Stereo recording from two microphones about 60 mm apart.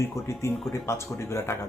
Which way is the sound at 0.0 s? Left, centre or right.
Left.